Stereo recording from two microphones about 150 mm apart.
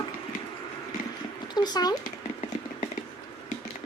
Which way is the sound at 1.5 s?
25° left (ahead or behind).